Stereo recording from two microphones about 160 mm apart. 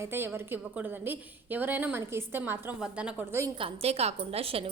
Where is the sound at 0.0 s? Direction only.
15° right (ahead or behind).